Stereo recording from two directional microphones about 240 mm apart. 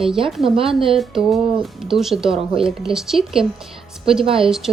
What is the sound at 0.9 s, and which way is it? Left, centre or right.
Speech, centre.